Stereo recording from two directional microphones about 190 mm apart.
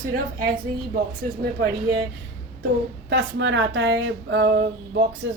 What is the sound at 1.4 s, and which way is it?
Speech, 55° right (ahead or behind).